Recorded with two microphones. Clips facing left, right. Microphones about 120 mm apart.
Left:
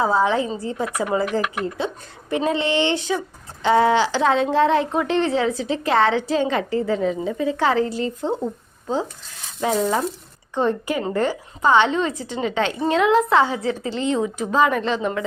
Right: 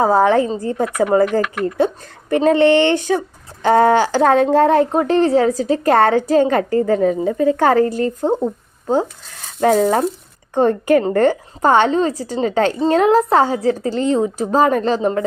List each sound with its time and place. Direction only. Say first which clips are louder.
0.0 s a woman's voice: right 6 dB; 50° right (ahead or behind)
9.6 s a woman's voice: right 7 dB; 50° right (ahead or behind)